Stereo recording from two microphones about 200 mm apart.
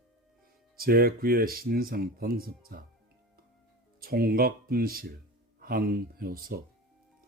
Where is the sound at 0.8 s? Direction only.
50° right (ahead or behind).